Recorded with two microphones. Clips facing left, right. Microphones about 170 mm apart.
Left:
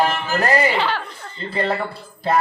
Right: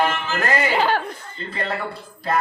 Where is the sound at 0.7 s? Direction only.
45° right (ahead or behind).